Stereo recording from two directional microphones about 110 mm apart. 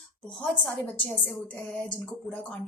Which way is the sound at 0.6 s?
10° left (ahead or behind).